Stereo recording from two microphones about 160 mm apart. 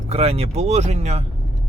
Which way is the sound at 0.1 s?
40° right (ahead or behind).